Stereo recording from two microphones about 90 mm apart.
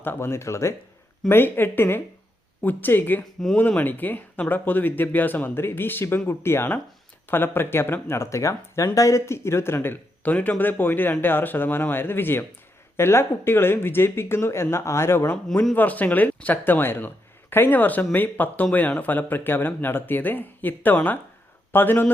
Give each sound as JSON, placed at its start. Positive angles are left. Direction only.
{"t": 0.0, "sound": "speech", "side_deg": 25}